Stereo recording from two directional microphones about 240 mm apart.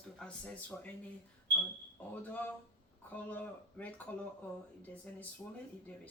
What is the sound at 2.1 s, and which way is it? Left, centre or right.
Speech, centre.